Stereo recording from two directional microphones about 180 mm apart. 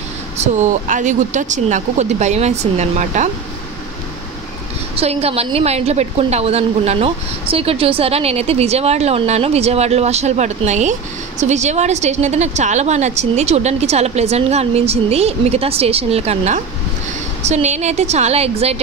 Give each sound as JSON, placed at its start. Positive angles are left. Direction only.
{"t": 0.4, "sound": "a woman's voice", "side_deg": -45}
{"t": 4.9, "sound": "a woman's voice", "side_deg": -35}